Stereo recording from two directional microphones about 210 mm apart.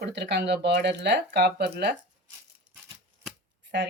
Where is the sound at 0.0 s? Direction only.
55° right (ahead or behind).